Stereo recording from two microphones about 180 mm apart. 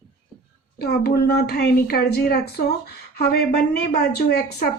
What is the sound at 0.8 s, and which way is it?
Speech, 65° left (ahead or behind).